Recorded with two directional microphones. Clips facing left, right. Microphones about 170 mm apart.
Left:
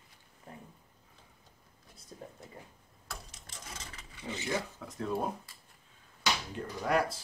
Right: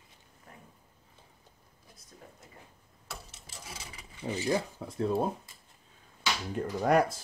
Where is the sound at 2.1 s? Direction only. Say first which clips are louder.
Left 6 dB; 30° left (ahead or behind).